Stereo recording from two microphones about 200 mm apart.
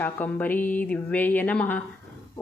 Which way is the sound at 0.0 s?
10° left (ahead or behind).